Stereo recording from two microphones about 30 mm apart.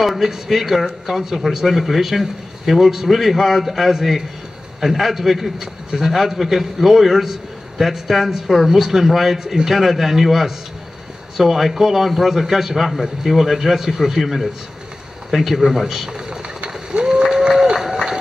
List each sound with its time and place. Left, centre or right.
0.2 s a man's voice: centre
16.6 s bird: right
17.1 s a sound: centre
17.7 s music: centre